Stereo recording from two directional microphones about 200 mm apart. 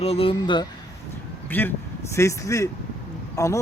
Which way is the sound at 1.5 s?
10° left (ahead or behind).